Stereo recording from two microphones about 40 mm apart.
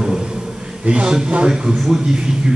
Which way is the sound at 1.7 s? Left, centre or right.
Centre.